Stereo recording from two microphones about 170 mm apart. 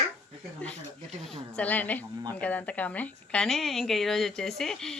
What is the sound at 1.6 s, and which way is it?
A woman's voice, 10° left (ahead or behind).